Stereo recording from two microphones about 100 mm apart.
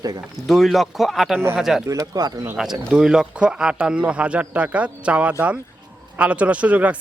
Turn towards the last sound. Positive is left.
turn(degrees=-15)  # may be behind; listen again after turning